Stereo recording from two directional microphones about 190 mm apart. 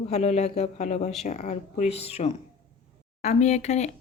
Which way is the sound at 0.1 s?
35° left (ahead or behind).